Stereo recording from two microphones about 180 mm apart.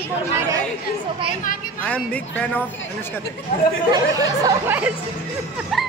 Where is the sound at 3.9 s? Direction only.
20° right (ahead or behind).